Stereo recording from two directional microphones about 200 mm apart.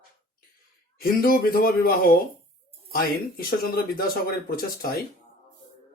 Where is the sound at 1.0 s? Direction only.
45° left (ahead or behind).